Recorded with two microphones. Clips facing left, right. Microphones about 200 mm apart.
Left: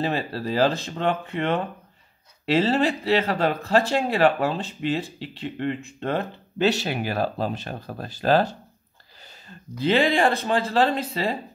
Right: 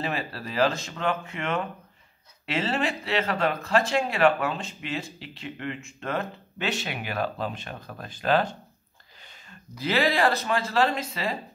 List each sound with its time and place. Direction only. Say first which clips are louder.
0.0 s speech: left 5 dB; 30° left (ahead or behind)
9.5 s speech: left 6 dB; 30° left (ahead or behind)